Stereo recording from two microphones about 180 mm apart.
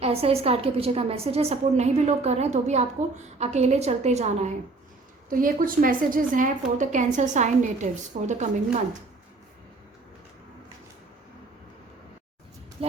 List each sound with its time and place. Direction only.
0.0 s a woman's voice: 35° right (ahead or behind)
5.3 s a woman's voice: 50° right (ahead or behind)
12.8 s speech: 35° right (ahead or behind)